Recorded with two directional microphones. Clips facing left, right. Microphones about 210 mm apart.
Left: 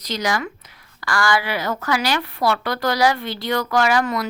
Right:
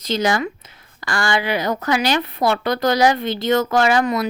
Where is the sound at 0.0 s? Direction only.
25° right (ahead or behind).